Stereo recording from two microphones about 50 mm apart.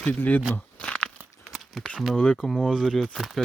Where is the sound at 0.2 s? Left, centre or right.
Left.